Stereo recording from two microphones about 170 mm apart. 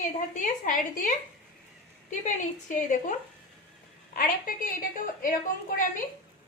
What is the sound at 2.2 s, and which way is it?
A woman's voice, 45° left (ahead or behind).